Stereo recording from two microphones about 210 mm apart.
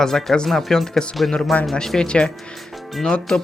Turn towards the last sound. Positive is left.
turn(degrees=5)  # may be behind; listen again after turning